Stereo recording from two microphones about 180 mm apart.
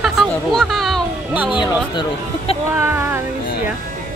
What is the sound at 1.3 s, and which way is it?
Speech, 10° right (ahead or behind).